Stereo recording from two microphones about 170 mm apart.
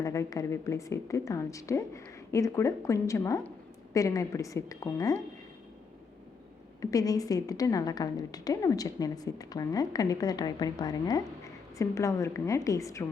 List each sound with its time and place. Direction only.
0.0 s a woman's voice: 20° left (ahead or behind)
6.9 s a woman's voice: 20° left (ahead or behind)